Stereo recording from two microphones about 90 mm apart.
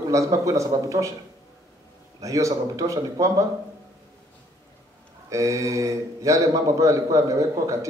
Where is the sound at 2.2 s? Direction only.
35° right (ahead or behind).